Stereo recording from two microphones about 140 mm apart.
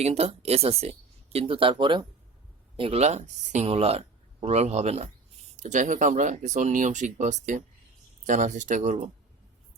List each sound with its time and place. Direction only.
0.0 s speech: 50° right (ahead or behind)
5.5 s speech: 60° right (ahead or behind)